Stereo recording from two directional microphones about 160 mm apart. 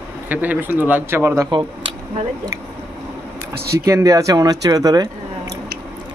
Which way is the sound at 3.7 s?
15° right (ahead or behind).